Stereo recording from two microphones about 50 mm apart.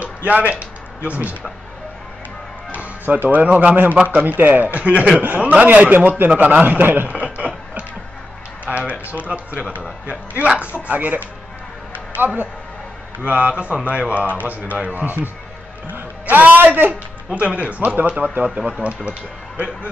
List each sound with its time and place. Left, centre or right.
0.0 s a sound: right
2.7 s a man's voice: right
4.7 s a man's voice: right
7.2 s a sound: right
8.7 s a man's voice: right
13.2 s a man's voice: right
17.4 s speech: right